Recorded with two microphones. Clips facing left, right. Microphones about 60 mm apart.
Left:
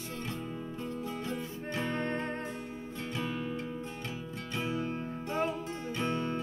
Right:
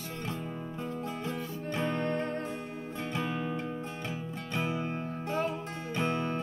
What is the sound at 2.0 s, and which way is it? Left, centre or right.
Music, left.